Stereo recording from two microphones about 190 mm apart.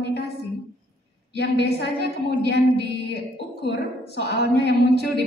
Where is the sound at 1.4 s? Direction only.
60° left (ahead or behind).